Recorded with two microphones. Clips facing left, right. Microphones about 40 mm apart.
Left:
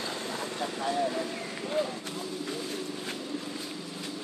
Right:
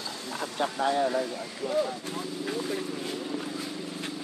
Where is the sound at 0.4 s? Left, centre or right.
Right.